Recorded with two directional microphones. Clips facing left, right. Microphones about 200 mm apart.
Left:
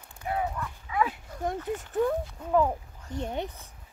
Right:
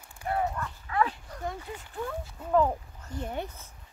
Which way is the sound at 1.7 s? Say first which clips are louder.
Left 10 dB; 45° left (ahead or behind).